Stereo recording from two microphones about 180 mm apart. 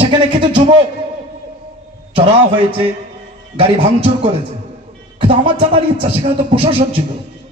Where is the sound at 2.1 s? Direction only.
30° right (ahead or behind).